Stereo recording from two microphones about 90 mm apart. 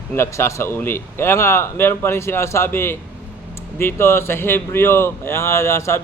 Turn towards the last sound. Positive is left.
turn(degrees=30)  # may be behind; listen again after turning